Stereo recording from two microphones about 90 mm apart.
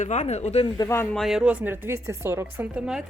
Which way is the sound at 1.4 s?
20° right (ahead or behind).